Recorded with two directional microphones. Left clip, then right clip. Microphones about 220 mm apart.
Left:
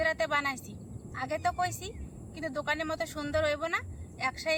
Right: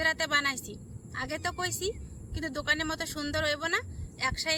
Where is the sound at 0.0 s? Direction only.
Centre (ahead or behind).